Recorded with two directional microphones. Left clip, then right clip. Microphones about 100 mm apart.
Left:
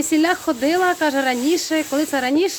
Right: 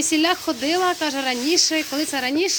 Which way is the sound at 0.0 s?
35° left (ahead or behind).